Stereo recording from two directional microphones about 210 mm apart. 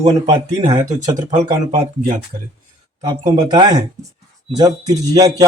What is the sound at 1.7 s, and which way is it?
Speech, 35° right (ahead or behind).